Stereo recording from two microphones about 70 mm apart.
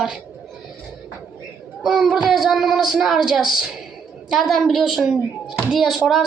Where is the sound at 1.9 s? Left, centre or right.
Centre.